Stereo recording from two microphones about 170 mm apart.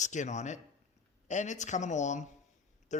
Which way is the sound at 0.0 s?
45° left (ahead or behind).